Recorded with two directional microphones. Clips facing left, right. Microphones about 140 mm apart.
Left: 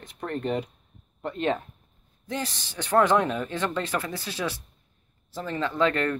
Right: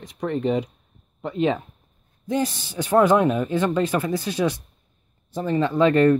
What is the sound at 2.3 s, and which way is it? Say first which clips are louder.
Speech: right 8 dB; 15° right (ahead or behind).